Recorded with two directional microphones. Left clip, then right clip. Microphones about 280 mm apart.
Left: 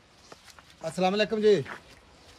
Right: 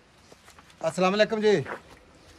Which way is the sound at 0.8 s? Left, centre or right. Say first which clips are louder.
Right 4 dB; right.